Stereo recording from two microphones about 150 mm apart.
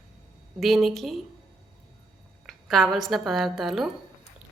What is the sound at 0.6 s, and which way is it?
Speech, centre (ahead or behind).